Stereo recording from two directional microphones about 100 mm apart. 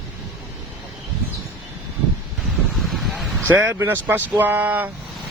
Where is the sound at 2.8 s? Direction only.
Centre (ahead or behind).